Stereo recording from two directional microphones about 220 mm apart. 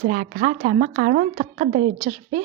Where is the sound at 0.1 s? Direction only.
35° right (ahead or behind).